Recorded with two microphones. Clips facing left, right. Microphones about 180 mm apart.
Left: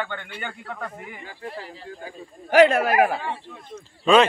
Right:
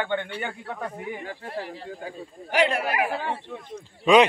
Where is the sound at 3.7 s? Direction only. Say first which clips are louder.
Even; 15° right (ahead or behind).